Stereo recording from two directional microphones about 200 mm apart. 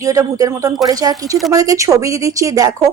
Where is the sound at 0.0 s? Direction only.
15° right (ahead or behind).